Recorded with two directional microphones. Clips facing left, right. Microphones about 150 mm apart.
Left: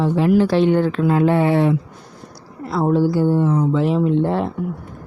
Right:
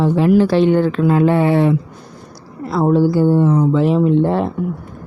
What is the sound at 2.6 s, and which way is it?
Speech, 60° right (ahead or behind).